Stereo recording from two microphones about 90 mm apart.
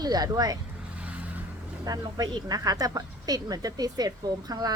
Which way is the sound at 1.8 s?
45° right (ahead or behind).